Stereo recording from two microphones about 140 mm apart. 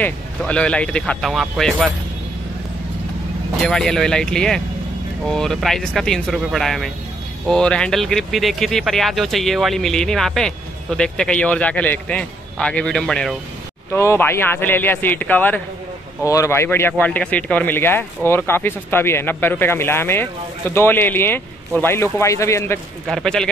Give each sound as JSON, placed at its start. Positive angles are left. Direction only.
{"t": 0.0, "sound": "speech", "side_deg": 10}
{"t": 3.6, "sound": "speech", "side_deg": 5}
{"t": 13.9, "sound": "speech", "side_deg": 20}
{"t": 23.0, "sound": "speech", "side_deg": 5}